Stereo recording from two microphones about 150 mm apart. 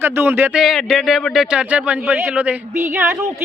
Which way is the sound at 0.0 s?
15° right (ahead or behind).